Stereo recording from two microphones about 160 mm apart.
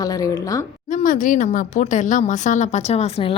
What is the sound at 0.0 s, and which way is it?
Speech, 20° left (ahead or behind).